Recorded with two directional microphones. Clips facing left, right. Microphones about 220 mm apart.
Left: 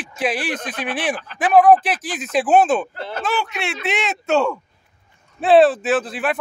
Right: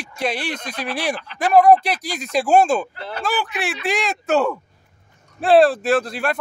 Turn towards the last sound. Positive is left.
turn(degrees=5)  # may be behind; listen again after turning